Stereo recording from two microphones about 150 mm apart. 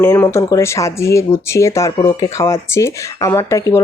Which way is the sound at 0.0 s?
15° left (ahead or behind).